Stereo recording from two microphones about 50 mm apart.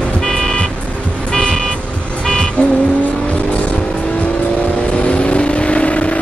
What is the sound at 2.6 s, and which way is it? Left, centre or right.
Vehicle, left.